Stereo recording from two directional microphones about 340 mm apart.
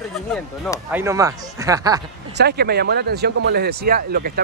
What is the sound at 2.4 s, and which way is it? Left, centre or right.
Speech, right.